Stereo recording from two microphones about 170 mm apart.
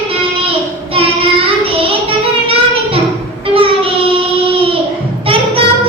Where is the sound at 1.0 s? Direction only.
35° right (ahead or behind).